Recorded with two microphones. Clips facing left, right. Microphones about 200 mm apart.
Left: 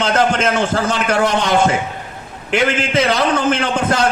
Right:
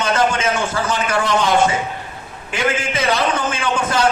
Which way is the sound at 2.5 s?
65° left (ahead or behind).